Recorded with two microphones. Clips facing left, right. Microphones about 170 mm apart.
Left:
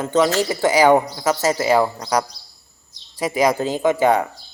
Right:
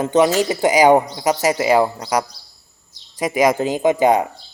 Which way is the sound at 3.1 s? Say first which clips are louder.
Right 2 dB; 15° right (ahead or behind).